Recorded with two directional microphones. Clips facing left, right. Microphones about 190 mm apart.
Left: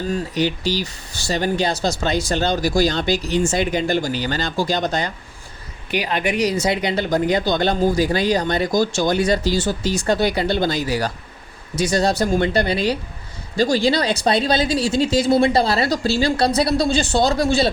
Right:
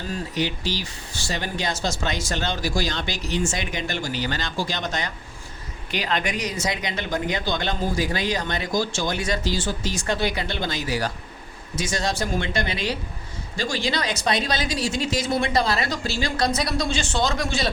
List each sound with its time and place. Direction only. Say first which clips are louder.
0.3 s speech: left 4 dB; 35° left (ahead or behind)
5.9 s speech: left 3 dB; 10° left (ahead or behind)
6.4 s speech: left 8 dB; 35° left (ahead or behind)